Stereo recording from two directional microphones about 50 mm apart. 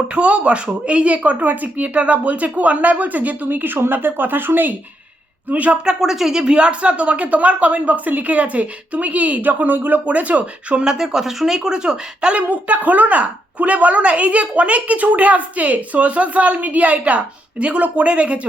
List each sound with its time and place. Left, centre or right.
0.1 s speech: right
5.5 s a woman's voice: right
5.8 s a woman's voice: centre
10.8 s speech: centre
12.4 s a woman's voice: right